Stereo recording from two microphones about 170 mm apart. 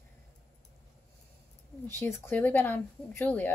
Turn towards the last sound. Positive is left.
turn(degrees=10)  # may be behind; listen again after turning